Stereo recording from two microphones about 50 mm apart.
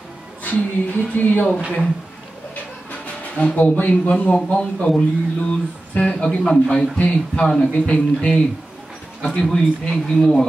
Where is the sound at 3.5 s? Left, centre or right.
Left.